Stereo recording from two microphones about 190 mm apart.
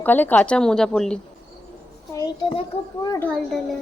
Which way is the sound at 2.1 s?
15° left (ahead or behind).